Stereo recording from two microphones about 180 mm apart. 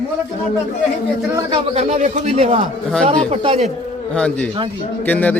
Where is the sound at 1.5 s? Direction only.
35° right (ahead or behind).